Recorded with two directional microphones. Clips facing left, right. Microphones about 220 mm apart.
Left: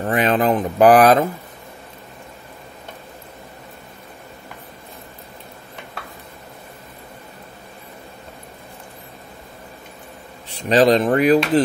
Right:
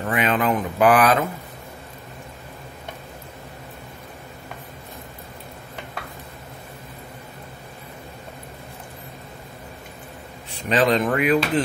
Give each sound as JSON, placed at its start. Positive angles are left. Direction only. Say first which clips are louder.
{"t": 0.0, "sound": "speech", "louder": "left 4 dB", "side_deg": 35}
{"t": 10.7, "sound": "speech", "louder": "left 5 dB", "side_deg": 35}